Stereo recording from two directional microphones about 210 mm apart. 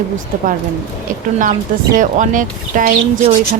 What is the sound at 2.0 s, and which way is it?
Speech, 40° right (ahead or behind).